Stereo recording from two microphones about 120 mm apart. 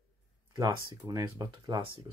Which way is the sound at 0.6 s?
35° right (ahead or behind).